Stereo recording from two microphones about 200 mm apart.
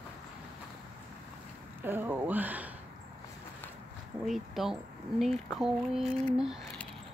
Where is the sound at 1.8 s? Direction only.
10° right (ahead or behind).